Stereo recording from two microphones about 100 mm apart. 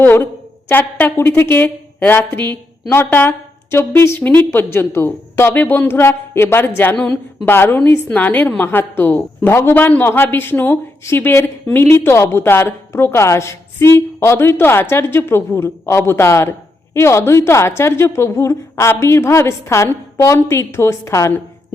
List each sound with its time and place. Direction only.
0.0 s a woman's voice: 20° left (ahead or behind)
6.9 s a woman's voice: 5° left (ahead or behind)
7.4 s a woman's voice: 20° left (ahead or behind)